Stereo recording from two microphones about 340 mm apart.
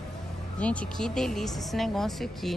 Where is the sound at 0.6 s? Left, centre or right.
Centre.